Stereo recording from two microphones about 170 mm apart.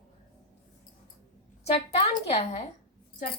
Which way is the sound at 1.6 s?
35° left (ahead or behind).